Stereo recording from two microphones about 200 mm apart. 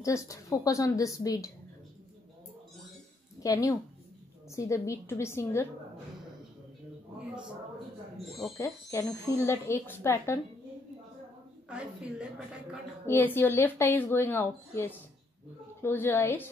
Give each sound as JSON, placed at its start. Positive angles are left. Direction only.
{"t": 0.0, "sound": "a woman's voice", "side_deg": 15}
{"t": 3.4, "sound": "a woman's voice", "side_deg": 15}
{"t": 8.5, "sound": "a woman's voice", "side_deg": 15}
{"t": 11.7, "sound": "a woman's voice", "side_deg": -5}
{"t": 13.0, "sound": "a woman's voice", "side_deg": 10}